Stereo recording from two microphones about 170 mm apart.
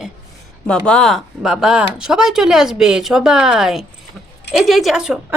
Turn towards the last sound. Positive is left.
turn(degrees=-5)  # may be behind; listen again after turning